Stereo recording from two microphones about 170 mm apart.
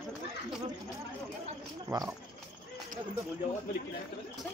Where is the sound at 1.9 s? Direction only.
20° right (ahead or behind).